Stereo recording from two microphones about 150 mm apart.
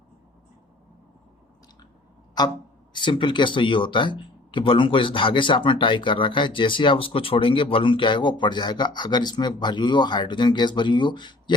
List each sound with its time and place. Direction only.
2.9 s speech: 30° left (ahead or behind)